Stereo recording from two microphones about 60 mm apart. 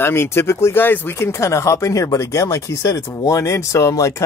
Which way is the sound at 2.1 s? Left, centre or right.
Left.